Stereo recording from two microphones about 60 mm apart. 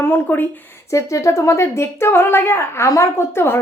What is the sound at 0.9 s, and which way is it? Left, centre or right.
A woman's voice, left.